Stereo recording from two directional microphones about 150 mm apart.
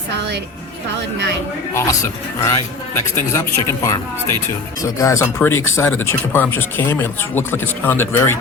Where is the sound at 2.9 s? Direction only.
20° left (ahead or behind).